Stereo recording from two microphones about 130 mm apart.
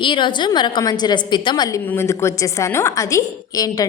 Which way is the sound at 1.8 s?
15° left (ahead or behind).